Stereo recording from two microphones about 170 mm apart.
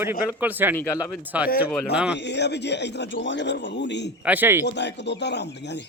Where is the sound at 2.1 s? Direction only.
90° left.